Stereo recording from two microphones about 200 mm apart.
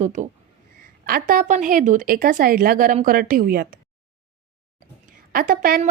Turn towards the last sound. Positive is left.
turn(degrees=-45)  # may be behind; listen again after turning